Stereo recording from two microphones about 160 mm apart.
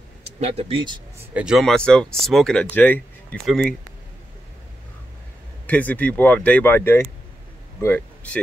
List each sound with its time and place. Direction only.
0.2 s speech: 40° right (ahead or behind)
1.3 s speech: 5° right (ahead or behind)
5.7 s speech: 10° left (ahead or behind)